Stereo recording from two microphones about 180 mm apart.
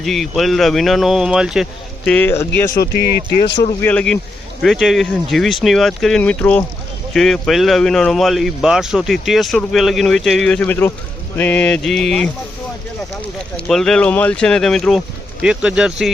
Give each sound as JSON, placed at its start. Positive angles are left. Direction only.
{"t": 0.0, "sound": "speech", "side_deg": 0}
{"t": 2.0, "sound": "speech", "side_deg": 10}
{"t": 3.4, "sound": "a man's voice", "side_deg": 75}
{"t": 3.8, "sound": "speech", "side_deg": 5}
{"t": 13.7, "sound": "speech", "side_deg": 0}